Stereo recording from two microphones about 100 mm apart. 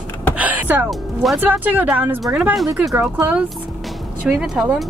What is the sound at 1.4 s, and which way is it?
Speech, 15° right (ahead or behind).